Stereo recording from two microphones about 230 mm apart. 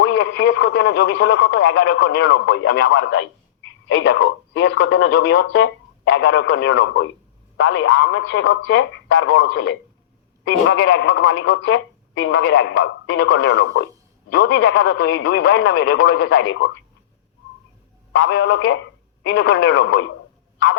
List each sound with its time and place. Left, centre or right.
0.0 s speech: left
18.2 s speech: left